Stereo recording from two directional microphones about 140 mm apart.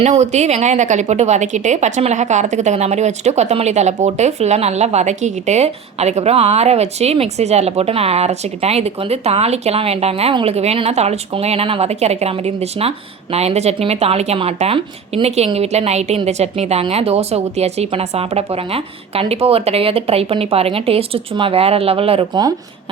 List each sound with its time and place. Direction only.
0.0 s a woman's voice: 55° right (ahead or behind)